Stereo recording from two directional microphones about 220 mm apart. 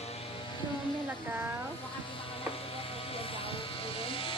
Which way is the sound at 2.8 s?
25° left (ahead or behind).